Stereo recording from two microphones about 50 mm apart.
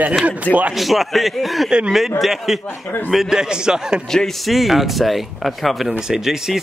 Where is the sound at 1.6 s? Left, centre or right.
Centre.